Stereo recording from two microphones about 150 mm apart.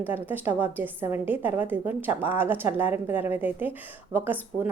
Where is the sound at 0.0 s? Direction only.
15° right (ahead or behind).